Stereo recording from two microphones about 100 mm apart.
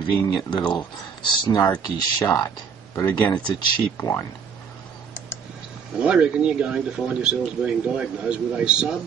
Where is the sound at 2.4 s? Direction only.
30° left (ahead or behind).